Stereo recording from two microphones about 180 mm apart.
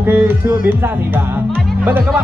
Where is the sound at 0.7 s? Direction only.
10° right (ahead or behind).